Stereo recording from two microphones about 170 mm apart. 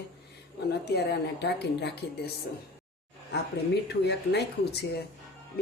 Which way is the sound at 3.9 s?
75° left (ahead or behind).